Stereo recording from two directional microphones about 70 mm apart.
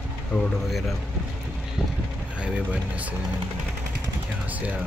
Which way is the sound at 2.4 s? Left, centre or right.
Centre.